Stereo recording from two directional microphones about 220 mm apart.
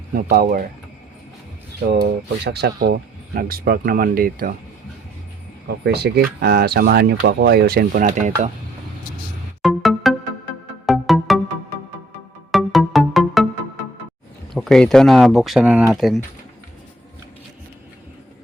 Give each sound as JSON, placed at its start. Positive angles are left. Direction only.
{"t": 0.1, "sound": "speech", "side_deg": -40}
{"t": 2.0, "sound": "speech", "side_deg": -45}
{"t": 5.8, "sound": "speech", "side_deg": -50}
{"t": 9.6, "sound": "music", "side_deg": 0}
{"t": 12.5, "sound": "music", "side_deg": 0}
{"t": 14.5, "sound": "speech", "side_deg": 0}